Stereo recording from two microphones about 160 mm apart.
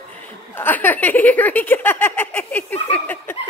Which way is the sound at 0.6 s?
10° left (ahead or behind).